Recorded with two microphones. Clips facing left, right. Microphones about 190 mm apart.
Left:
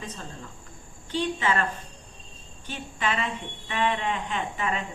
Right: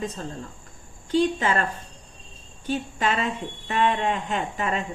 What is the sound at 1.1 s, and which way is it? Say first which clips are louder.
Speech: right 5 dB; 40° right (ahead or behind).